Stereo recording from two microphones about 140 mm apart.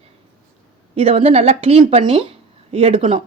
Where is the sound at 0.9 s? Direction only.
45° right (ahead or behind).